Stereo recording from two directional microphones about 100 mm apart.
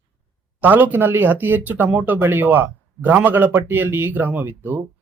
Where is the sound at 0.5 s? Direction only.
20° right (ahead or behind).